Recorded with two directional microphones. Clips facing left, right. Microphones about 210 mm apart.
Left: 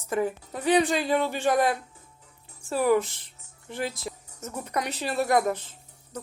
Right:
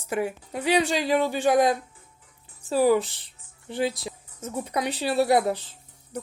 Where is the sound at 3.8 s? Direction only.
30° right (ahead or behind).